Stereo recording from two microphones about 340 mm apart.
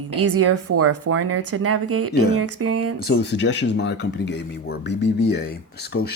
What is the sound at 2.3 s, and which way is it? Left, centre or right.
Speech, right.